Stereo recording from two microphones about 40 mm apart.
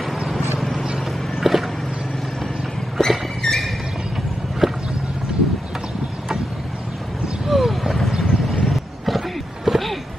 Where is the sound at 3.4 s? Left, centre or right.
Centre.